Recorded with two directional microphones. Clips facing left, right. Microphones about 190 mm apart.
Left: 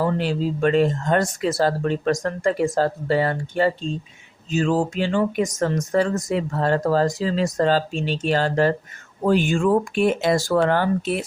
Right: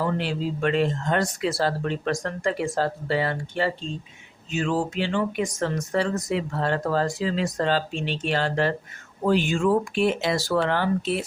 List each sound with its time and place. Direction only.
0.0 s speech: 40° left (ahead or behind)